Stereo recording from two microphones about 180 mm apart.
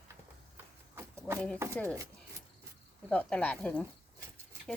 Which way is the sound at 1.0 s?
10° right (ahead or behind).